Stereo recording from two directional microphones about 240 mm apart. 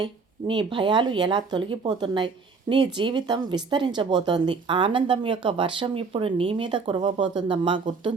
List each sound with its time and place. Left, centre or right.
0.0 s speech: centre